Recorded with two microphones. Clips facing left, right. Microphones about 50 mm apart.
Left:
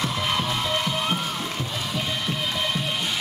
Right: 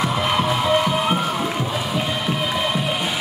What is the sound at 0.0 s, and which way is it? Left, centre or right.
Music, centre.